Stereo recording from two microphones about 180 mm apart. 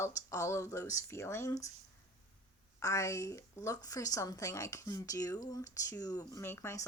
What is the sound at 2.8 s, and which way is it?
Speech, 15° left (ahead or behind).